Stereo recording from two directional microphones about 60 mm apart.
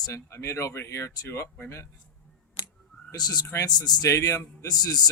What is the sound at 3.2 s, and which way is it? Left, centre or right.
Speech, left.